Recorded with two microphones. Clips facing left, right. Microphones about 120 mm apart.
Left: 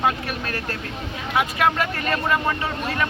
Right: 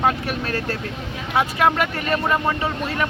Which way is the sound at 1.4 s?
30° right (ahead or behind).